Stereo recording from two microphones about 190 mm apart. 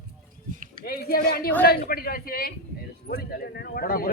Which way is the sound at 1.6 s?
55° left (ahead or behind).